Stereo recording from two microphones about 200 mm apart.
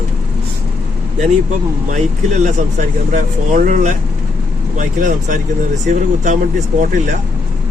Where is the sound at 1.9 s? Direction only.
35° right (ahead or behind).